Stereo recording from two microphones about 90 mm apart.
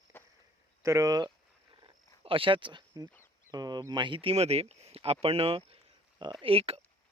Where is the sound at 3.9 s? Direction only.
65° right (ahead or behind).